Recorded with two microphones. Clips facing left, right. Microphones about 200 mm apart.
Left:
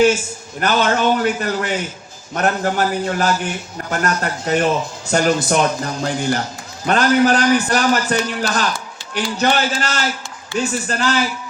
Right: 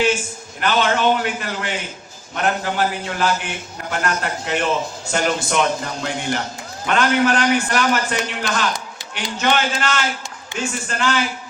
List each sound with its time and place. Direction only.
0.6 s a man's voice: 40° left (ahead or behind)